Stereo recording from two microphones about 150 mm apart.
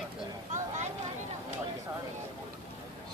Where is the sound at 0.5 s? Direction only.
55° right (ahead or behind).